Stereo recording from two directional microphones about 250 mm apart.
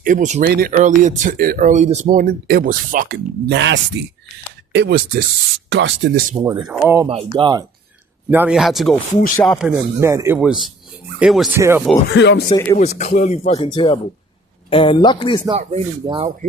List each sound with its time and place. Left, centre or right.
0.0 s speech: right
6.3 s speech: centre
7.1 s speech: right
8.3 s speech: centre
12.1 s speech: left
12.7 s speech: left
15.4 s speech: right